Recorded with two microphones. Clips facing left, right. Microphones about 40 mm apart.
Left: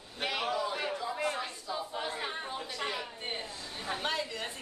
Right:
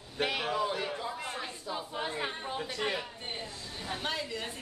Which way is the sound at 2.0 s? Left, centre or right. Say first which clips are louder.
Right 4 dB; centre.